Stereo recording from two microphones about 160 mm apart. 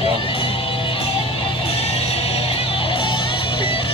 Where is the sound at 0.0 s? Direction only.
35° left (ahead or behind).